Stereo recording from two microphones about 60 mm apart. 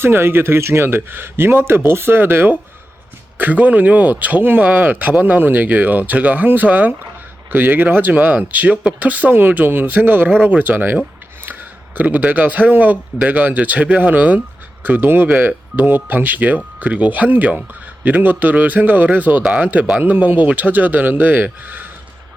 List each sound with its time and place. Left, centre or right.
0.0 s speech: right
11.9 s speech: right
19.4 s speech: centre
20.0 s speech: right